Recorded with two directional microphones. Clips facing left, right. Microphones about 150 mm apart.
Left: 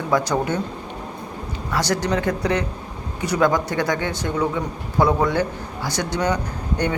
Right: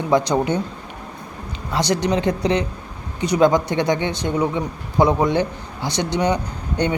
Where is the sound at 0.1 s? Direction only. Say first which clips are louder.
Right 3 dB; 20° right (ahead or behind).